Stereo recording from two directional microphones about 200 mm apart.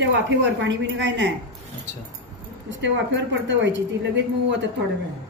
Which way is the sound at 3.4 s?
60° right (ahead or behind).